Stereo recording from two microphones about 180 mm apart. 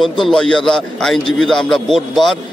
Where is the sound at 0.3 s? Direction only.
5° left (ahead or behind).